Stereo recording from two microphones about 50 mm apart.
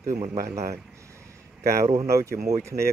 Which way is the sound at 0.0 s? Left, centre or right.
Right.